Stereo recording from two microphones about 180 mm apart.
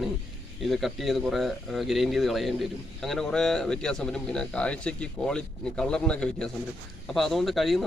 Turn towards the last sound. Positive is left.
turn(degrees=0)  # may be behind; listen again after turning